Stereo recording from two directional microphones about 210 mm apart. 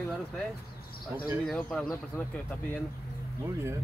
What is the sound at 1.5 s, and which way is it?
Speech, 5° left (ahead or behind).